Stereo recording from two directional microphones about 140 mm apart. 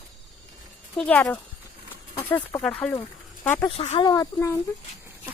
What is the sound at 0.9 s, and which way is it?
Speech, 5° left (ahead or behind).